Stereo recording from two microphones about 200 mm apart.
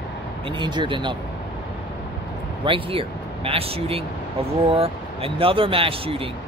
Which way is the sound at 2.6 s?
25° right (ahead or behind).